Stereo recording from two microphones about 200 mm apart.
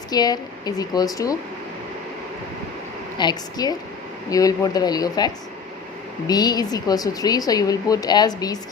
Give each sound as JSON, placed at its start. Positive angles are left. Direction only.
{"t": 0.1, "sound": "a woman's voice", "side_deg": 20}
{"t": 3.2, "sound": "a woman's voice", "side_deg": 20}